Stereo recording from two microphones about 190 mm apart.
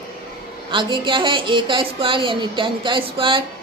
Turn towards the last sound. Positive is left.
turn(degrees=-25)  # may be behind; listen again after turning